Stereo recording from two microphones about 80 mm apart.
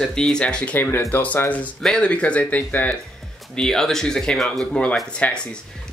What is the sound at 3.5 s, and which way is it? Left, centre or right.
Speech, centre.